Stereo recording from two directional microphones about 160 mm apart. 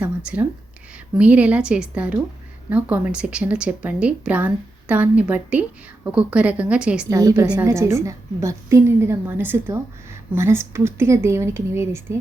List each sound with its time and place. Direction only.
0.3 s speech: 5° right (ahead or behind)
7.1 s a woman's voice: 20° right (ahead or behind)
7.4 s speech: 10° right (ahead or behind)